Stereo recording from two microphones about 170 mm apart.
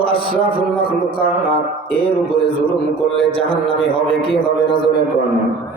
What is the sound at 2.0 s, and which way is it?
A man's voice, 30° left (ahead or behind).